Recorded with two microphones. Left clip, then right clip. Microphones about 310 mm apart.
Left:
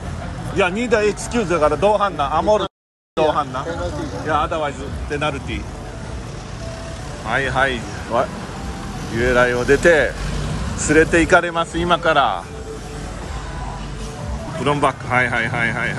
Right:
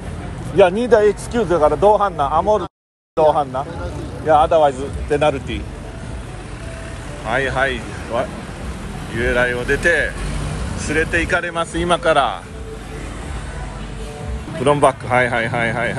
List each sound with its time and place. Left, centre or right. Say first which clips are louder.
0.6 s a man's voice: right 5 dB; centre
4.3 s a man's voice: right 8 dB; centre
7.2 s speech: even; centre
10.9 s speech: left 4 dB; left
11.2 s speech: left 4 dB; centre
14.6 s a man's voice: right 4 dB; centre